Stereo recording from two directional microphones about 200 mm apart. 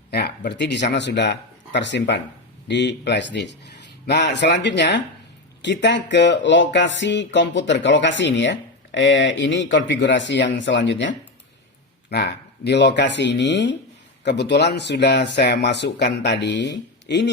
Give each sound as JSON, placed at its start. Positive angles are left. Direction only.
{"t": 0.1, "sound": "speech", "side_deg": 55}
{"t": 12.1, "sound": "speech", "side_deg": 55}